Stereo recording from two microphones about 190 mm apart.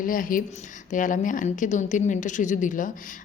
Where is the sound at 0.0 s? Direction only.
45° left (ahead or behind).